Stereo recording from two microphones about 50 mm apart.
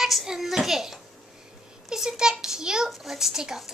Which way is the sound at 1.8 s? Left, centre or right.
Centre.